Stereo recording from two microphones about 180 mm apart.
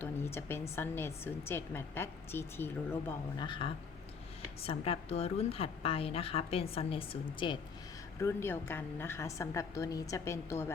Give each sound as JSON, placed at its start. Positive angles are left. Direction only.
{"t": 0.0, "sound": "a sound", "side_deg": 10}
{"t": 0.8, "sound": "a woman's voice", "side_deg": 15}
{"t": 3.3, "sound": "a woman's voice", "side_deg": 25}
{"t": 8.2, "sound": "a woman's voice", "side_deg": 15}